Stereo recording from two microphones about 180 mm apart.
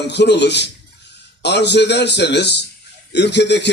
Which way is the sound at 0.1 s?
70° left (ahead or behind).